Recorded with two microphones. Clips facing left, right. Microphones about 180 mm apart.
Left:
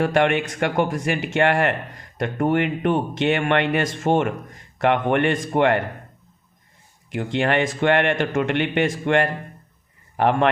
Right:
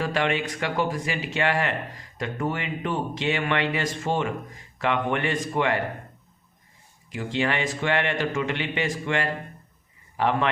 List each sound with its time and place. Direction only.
0.0 s speech: 55° left (ahead or behind)
7.1 s speech: 60° left (ahead or behind)